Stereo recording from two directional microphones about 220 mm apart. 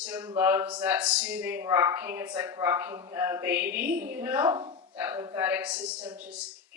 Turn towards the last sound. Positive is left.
turn(degrees=-5)  # may be behind; listen again after turning